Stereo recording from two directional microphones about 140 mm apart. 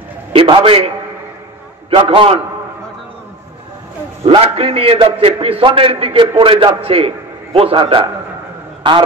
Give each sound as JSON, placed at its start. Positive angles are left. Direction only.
{"t": 0.3, "sound": "a man's voice", "side_deg": -40}
{"t": 2.0, "sound": "a man's voice", "side_deg": -40}
{"t": 4.3, "sound": "a man's voice", "side_deg": -45}